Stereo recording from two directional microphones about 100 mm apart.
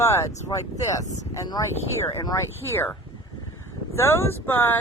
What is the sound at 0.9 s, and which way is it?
Speech, 35° left (ahead or behind).